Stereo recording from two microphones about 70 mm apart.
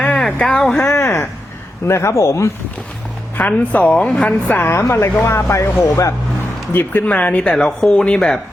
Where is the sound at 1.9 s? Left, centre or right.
Left.